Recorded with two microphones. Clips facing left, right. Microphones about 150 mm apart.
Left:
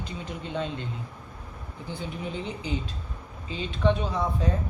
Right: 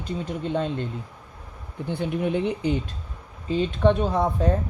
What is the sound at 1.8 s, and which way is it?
Speech, 60° right (ahead or behind).